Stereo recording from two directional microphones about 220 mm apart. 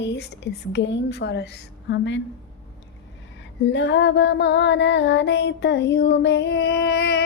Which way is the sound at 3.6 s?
55° left (ahead or behind).